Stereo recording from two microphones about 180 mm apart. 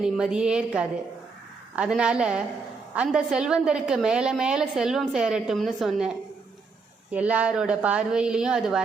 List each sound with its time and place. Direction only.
0.0 s a woman's voice: 5° right (ahead or behind)